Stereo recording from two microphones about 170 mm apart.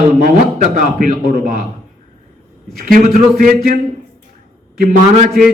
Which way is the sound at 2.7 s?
55° right (ahead or behind).